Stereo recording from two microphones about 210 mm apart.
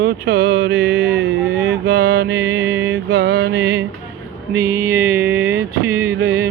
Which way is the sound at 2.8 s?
55° right (ahead or behind).